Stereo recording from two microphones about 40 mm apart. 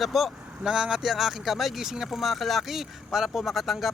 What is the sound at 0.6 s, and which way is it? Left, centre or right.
Speech, centre.